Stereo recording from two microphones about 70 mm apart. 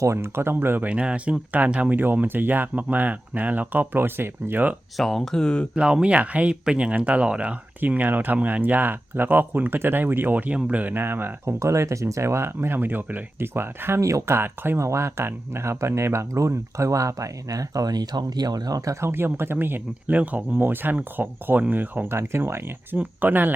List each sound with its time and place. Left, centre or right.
0.0 s speech: right
0.9 s speech: centre
4.9 s speech: centre
5.7 s speech: centre; by 11.5 s right
11.6 s speech: right
14.0 s speech: right
14.3 s speech: right
18.9 s speech: right